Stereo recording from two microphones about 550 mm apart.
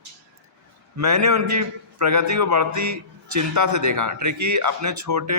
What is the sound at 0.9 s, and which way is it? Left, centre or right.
A man's voice, right.